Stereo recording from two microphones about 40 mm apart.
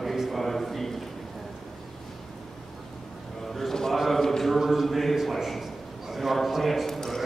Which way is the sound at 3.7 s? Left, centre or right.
Centre.